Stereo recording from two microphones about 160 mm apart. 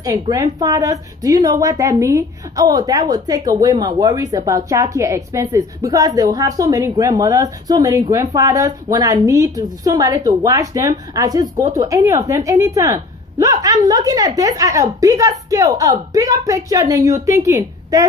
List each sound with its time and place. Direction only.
0.0 s a woman's voice: 20° right (ahead or behind)